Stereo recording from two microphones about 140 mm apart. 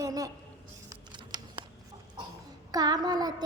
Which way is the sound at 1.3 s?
30° right (ahead or behind).